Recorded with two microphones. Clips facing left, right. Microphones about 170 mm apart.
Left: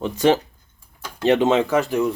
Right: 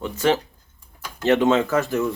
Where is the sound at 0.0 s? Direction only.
20° left (ahead or behind).